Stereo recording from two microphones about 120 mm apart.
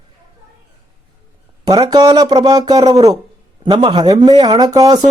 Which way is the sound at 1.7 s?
35° right (ahead or behind).